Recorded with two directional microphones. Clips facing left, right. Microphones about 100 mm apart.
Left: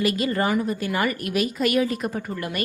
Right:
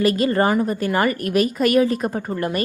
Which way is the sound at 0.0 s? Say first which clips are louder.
Right 5 dB; 40° right (ahead or behind).